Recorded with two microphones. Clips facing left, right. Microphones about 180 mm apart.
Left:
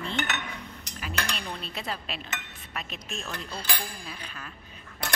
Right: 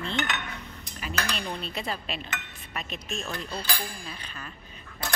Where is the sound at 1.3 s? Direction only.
Centre (ahead or behind).